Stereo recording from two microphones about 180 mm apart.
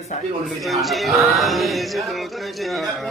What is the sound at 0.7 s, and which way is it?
A man's voice, centre (ahead or behind).